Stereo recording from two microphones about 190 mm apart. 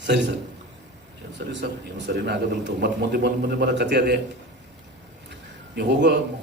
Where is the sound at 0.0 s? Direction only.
65° right (ahead or behind).